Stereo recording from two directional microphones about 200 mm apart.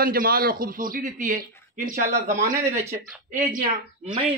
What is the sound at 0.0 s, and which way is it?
Speech, 45° right (ahead or behind).